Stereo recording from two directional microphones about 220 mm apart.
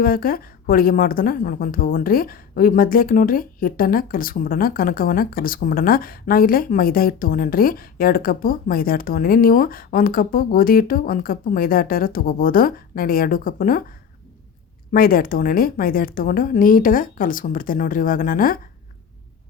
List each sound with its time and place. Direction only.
0.0 s speech: 40° left (ahead or behind)
14.9 s speech: 40° left (ahead or behind)